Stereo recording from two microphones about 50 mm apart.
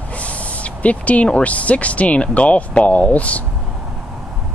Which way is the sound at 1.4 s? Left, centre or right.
Left.